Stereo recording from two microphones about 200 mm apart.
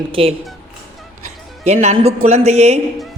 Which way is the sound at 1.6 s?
35° right (ahead or behind).